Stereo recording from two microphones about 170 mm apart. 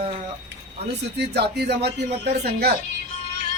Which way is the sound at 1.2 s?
75° right (ahead or behind).